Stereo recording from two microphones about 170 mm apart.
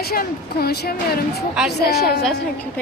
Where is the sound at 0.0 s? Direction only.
65° left (ahead or behind).